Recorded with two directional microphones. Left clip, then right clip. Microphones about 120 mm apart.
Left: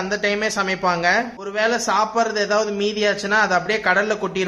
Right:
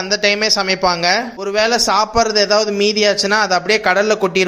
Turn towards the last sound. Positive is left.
turn(degrees=-25)  # may be behind; listen again after turning